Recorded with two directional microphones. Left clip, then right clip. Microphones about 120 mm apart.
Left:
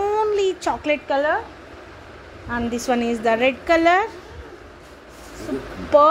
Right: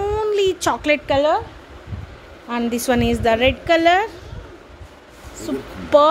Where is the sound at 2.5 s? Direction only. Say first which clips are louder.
Right 2 dB; 40° right (ahead or behind).